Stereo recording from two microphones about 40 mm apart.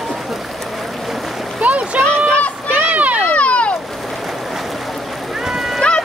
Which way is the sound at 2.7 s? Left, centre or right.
Right.